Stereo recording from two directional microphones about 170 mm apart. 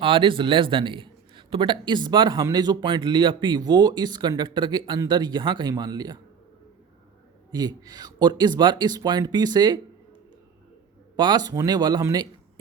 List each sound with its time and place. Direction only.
0.0 s a man's voice: 30° right (ahead or behind)
7.5 s a man's voice: 25° right (ahead or behind)
11.2 s a man's voice: 25° right (ahead or behind)